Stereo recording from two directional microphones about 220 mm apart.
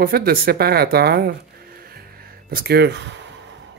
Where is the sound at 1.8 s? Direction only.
45° right (ahead or behind).